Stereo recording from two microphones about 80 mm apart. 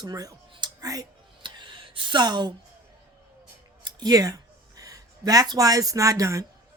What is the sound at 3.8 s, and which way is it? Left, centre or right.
Speech, right.